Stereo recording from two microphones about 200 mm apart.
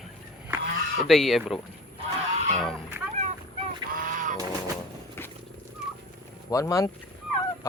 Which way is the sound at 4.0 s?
40° right (ahead or behind).